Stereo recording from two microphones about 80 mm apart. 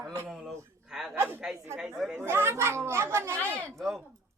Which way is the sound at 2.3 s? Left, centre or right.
Right.